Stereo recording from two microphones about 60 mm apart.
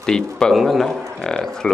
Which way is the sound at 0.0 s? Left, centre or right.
Centre.